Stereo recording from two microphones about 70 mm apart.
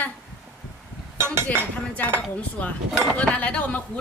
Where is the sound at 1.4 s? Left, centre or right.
Left.